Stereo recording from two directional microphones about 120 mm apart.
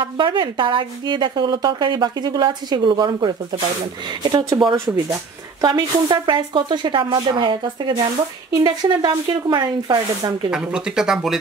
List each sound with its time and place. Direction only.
0.0 s a woman's voice: 40° right (ahead or behind)
10.5 s speech: 5° right (ahead or behind)